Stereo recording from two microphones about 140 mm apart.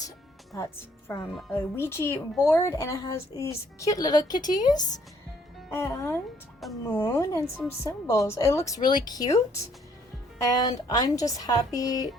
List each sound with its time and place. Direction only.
0.5 s speech: 20° left (ahead or behind)
10.4 s speech: 25° left (ahead or behind)